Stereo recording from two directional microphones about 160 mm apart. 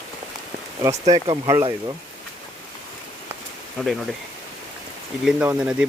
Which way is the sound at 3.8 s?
Centre (ahead or behind).